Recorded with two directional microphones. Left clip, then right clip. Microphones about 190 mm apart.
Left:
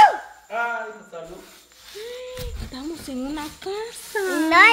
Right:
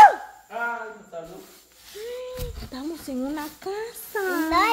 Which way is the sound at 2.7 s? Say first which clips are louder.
Even; 5° right (ahead or behind).